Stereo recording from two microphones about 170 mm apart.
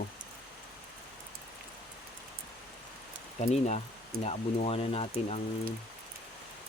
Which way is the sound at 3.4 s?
40° left (ahead or behind).